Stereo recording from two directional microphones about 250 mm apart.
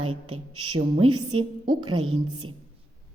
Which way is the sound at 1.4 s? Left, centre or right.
Centre.